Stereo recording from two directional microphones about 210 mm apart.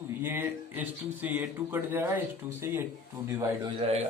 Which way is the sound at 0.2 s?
10° right (ahead or behind).